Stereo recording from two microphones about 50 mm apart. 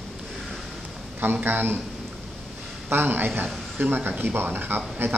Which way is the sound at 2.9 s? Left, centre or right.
Right.